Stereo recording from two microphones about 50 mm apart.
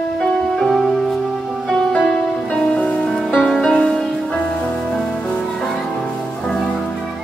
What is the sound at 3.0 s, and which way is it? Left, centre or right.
Music, centre.